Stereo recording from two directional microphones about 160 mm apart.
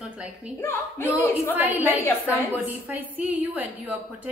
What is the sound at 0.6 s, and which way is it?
Speech, 15° left (ahead or behind).